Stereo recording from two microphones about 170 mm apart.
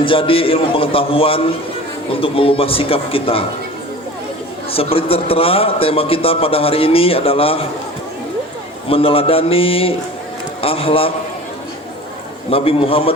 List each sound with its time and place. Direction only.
0.0 s a man's voice: 30° left (ahead or behind)
4.7 s a man's voice: 35° left (ahead or behind)
8.9 s a man's voice: 35° left (ahead or behind)
12.5 s a man's voice: 35° left (ahead or behind)